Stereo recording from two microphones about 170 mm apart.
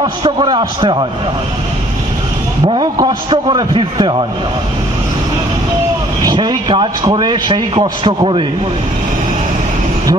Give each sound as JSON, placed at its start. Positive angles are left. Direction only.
{"t": 0.0, "sound": "speech", "side_deg": -30}
{"t": 2.7, "sound": "speech", "side_deg": -25}
{"t": 6.2, "sound": "speech", "side_deg": -25}